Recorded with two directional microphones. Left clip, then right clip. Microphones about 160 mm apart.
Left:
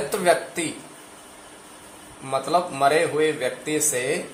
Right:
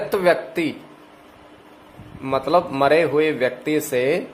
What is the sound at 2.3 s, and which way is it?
Speech, 65° right (ahead or behind).